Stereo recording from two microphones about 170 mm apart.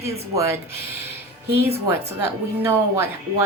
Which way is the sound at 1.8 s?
15° right (ahead or behind).